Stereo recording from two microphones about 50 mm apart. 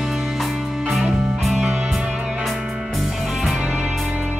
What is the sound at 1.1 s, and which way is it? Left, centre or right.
Music, centre.